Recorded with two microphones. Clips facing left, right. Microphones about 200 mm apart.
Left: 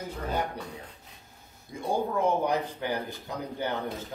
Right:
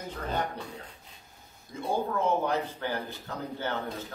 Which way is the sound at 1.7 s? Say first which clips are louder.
Left 1 dB; 15° left (ahead or behind).